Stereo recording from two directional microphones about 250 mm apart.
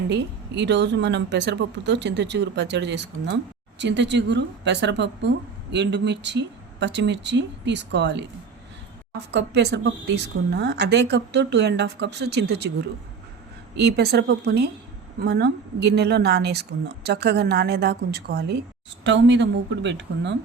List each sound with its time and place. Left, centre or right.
0.1 s speech: right
9.3 s a woman's voice: right